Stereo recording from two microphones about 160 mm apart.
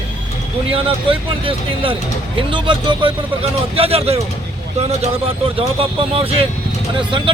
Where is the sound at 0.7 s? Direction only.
35° right (ahead or behind).